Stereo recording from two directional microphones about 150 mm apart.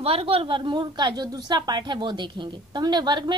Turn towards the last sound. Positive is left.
turn(degrees=-30)  # may be behind; listen again after turning